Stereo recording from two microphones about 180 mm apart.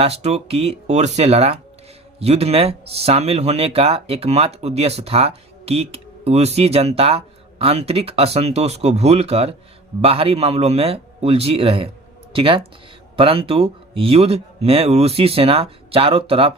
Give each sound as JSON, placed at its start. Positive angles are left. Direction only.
{"t": 0.0, "sound": "speech", "side_deg": -35}